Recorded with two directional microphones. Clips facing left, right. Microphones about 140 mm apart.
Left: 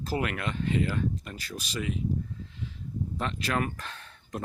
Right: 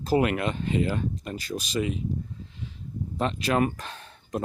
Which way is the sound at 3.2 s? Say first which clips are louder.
Right 7 dB; 20° right (ahead or behind).